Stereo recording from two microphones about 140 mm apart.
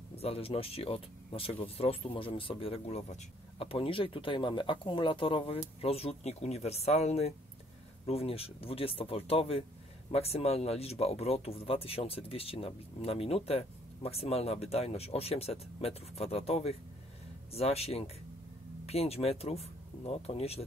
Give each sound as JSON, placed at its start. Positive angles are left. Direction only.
{"t": 0.1, "sound": "speech", "side_deg": 45}